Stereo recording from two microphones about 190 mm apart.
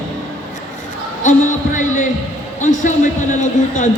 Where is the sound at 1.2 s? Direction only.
40° left (ahead or behind).